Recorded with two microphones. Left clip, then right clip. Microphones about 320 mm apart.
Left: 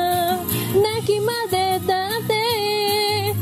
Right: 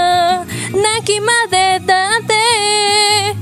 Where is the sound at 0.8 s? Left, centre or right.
Right.